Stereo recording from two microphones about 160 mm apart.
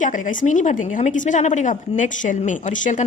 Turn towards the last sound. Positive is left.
turn(degrees=50)  # may be behind; listen again after turning